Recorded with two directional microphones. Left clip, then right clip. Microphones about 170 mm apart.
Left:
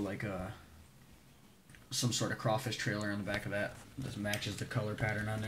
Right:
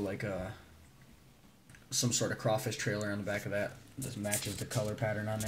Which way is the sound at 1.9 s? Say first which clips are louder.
Right 2 dB; 10° right (ahead or behind).